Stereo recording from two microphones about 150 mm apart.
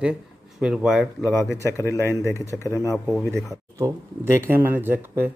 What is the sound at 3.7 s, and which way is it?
Speech, 20° right (ahead or behind).